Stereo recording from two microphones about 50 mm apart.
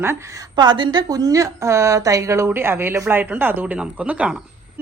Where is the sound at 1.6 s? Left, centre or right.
Right.